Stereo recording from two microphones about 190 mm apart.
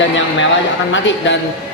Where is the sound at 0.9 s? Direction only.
75° left (ahead or behind).